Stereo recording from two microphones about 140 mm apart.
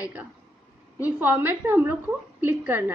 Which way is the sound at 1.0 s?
15° right (ahead or behind).